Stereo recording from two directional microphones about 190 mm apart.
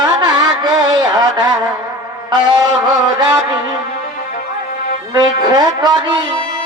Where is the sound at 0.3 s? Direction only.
20° right (ahead or behind).